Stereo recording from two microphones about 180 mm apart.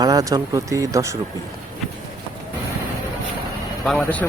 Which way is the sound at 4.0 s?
10° left (ahead or behind).